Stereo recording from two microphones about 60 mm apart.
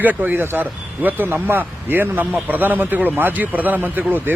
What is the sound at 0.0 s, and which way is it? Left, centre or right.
Speech, right.